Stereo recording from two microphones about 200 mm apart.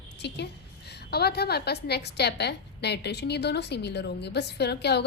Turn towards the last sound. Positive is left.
turn(degrees=55)  # may be behind; listen again after turning